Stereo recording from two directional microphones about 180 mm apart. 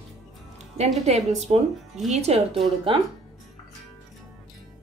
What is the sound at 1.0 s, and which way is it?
A woman's voice, 40° right (ahead or behind).